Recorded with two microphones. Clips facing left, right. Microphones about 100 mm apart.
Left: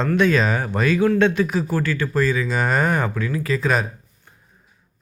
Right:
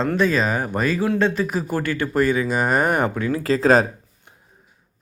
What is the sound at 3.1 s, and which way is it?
Speech, 30° right (ahead or behind).